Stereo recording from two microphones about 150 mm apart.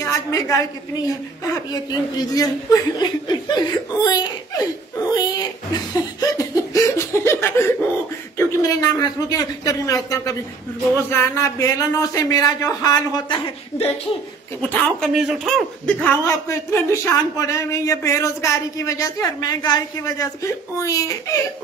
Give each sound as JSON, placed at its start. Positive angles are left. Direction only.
{"t": 0.0, "sound": "a woman's voice", "side_deg": 20}
{"t": 1.5, "sound": "chuckle", "side_deg": 25}
{"t": 8.4, "sound": "speech", "side_deg": 20}
{"t": 14.6, "sound": "speech", "side_deg": 10}
{"t": 15.1, "sound": "speech", "side_deg": 0}
{"t": 16.1, "sound": "speech", "side_deg": 15}